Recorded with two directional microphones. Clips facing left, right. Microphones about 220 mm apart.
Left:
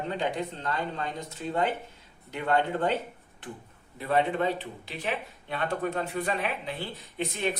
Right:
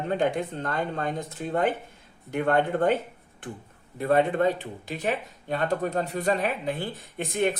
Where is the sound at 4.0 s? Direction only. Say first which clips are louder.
Right 4 dB; 50° right (ahead or behind).